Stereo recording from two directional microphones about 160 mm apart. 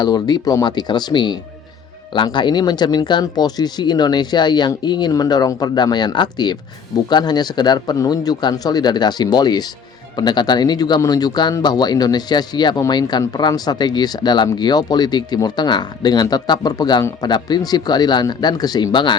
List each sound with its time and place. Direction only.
0.0 s speech: 25° left (ahead or behind)